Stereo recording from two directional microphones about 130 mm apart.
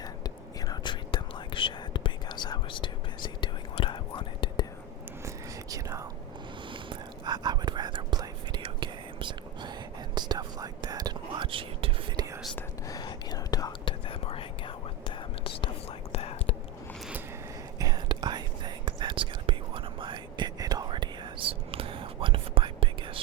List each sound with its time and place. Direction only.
0.0 s whispering: 30° left (ahead or behind)
5.7 s whispering: 25° right (ahead or behind)
6.7 s whispering: 40° right (ahead or behind)
12.9 s whispering: 30° left (ahead or behind)
14.1 s whispering: 45° left (ahead or behind)
17.7 s whispering: 30° right (ahead or behind)